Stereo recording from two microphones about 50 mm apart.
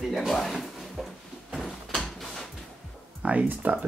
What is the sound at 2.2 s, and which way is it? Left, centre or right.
Music, centre.